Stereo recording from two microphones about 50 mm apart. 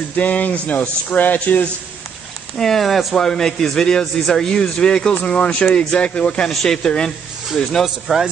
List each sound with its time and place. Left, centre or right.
0.1 s speech: left
2.5 s speech: centre
3.2 s speech: centre
6.5 s speech: centre
7.8 s speech: centre